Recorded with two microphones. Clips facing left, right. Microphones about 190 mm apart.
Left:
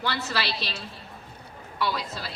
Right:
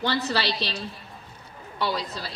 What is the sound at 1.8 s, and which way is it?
Speech, 35° right (ahead or behind).